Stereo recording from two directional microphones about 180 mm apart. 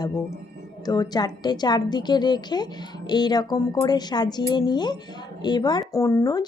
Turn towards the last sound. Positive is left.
turn(degrees=20)  # may be behind; listen again after turning